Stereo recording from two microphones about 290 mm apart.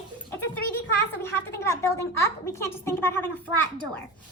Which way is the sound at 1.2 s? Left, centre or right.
Centre.